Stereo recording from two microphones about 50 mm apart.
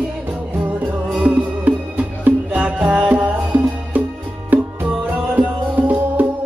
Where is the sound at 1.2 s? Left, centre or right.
Right.